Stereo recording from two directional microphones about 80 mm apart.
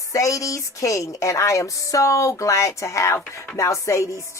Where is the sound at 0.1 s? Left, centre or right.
Left.